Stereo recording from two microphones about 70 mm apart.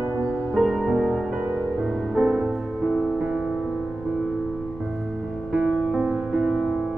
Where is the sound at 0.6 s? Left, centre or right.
Centre.